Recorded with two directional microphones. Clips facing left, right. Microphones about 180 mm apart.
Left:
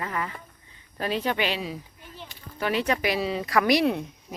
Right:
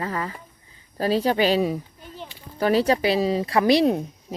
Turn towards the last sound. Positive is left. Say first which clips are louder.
# right 4 dB
turn(degrees=-35)  # may be behind; listen again after turning